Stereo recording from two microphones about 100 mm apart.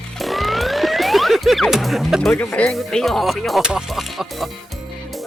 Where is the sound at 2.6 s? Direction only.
5° left (ahead or behind).